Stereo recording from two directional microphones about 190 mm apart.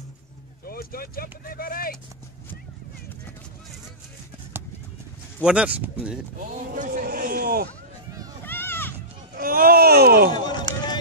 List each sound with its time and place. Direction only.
0.7 s speech: 50° left (ahead or behind)
5.4 s speech: 5° right (ahead or behind)
6.7 s a sound: 45° right (ahead or behind)
8.5 s run: 10° left (ahead or behind)
9.4 s speech: 50° right (ahead or behind)
10.3 s run: 25° left (ahead or behind)